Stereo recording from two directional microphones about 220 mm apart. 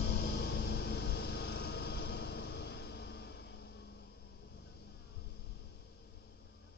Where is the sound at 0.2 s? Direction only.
50° left (ahead or behind).